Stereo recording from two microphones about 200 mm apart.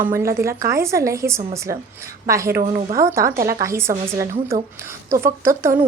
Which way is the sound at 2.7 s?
30° right (ahead or behind).